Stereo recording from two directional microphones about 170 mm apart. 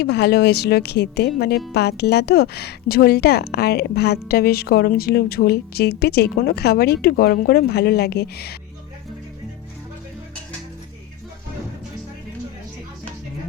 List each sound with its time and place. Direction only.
0.0 s speech: 75° left (ahead or behind)